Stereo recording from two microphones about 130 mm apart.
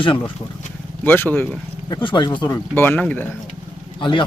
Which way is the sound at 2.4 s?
15° left (ahead or behind).